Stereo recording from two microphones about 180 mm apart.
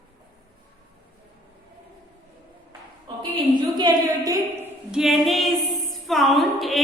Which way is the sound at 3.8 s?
20° right (ahead or behind).